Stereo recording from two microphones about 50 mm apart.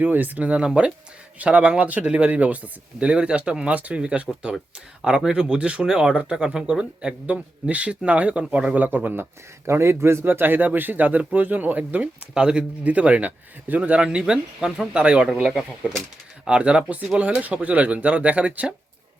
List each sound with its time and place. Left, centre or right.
0.0 s speech: right
0.6 s speech: centre
3.8 s speech: right
9.6 s speech: right
12.3 s speech: centre
12.8 s speech: right; by 15.9 s centre
16.5 s speech: right